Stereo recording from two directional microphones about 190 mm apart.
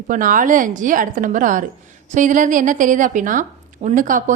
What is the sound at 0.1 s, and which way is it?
A woman's voice, 45° right (ahead or behind).